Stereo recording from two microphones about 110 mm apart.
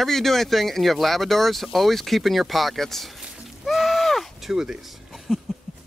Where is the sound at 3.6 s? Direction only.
Centre (ahead or behind).